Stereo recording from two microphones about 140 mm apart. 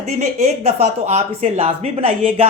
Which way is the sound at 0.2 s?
55° right (ahead or behind).